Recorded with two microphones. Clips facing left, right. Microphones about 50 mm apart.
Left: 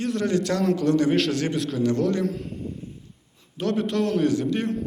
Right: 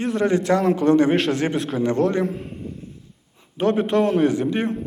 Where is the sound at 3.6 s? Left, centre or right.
Right.